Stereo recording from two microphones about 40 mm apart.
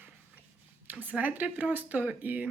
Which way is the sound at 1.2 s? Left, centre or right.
Right.